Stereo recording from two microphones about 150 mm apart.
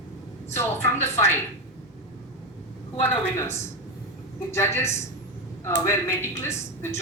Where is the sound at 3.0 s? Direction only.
20° left (ahead or behind).